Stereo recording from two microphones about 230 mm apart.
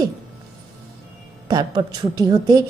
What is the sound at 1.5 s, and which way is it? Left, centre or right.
A woman's voice, centre.